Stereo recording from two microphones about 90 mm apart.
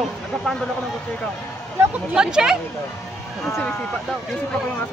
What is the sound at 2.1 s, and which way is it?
Speech, 5° right (ahead or behind).